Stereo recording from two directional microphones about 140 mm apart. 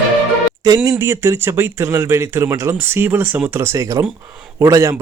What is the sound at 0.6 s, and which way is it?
A man's voice, 25° right (ahead or behind).